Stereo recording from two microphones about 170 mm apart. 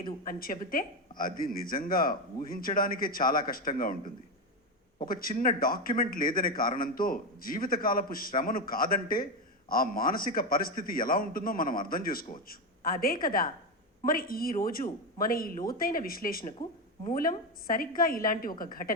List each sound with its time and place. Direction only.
0.0 s speech: 55° left (ahead or behind)
5.0 s speech: 55° left (ahead or behind)